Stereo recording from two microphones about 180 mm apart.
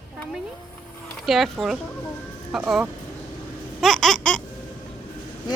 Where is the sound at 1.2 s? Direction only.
Centre (ahead or behind).